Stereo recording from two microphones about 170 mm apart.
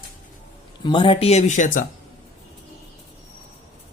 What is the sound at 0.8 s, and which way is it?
Speech, 30° left (ahead or behind).